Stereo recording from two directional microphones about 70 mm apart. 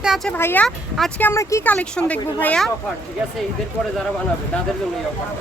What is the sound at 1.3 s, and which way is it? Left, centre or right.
Speech, left.